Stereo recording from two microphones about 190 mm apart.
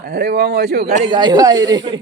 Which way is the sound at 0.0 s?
60° right (ahead or behind).